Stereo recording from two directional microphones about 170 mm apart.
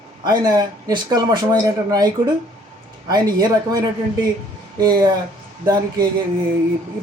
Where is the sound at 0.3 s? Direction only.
25° right (ahead or behind).